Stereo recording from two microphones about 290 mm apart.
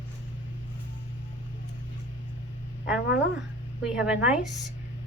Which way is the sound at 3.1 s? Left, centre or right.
Left.